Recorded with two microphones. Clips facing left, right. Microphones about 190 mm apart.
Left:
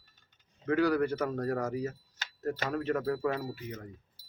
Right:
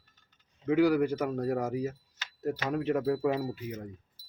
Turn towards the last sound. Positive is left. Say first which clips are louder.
# right 4 dB
turn(degrees=-15)  # may be behind; listen again after turning